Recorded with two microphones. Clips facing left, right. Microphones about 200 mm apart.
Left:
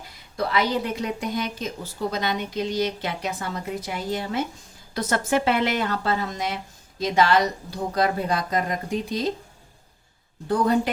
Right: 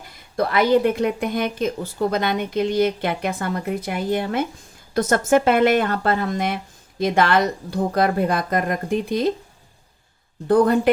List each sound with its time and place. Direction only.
0.3 s speech: 55° right (ahead or behind)
10.5 s speech: 55° right (ahead or behind)